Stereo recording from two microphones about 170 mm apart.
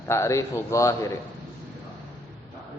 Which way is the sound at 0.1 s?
15° left (ahead or behind).